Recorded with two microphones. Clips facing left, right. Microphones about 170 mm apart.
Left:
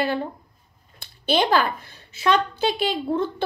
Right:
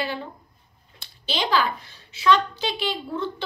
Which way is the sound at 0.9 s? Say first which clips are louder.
Left 8 dB; 55° left (ahead or behind).